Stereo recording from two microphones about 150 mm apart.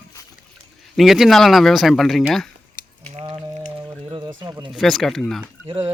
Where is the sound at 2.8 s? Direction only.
70° left (ahead or behind).